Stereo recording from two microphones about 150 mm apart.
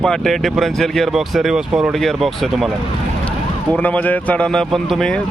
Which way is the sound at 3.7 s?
10° left (ahead or behind).